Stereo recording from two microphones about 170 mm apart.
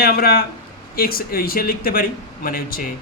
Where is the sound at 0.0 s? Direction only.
60° left (ahead or behind).